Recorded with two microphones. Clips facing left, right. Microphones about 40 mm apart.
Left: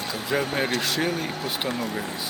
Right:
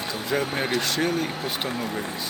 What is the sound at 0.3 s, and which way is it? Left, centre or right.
Speech, centre.